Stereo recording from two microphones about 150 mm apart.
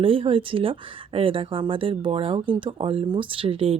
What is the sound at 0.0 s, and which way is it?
Speech, 35° right (ahead or behind).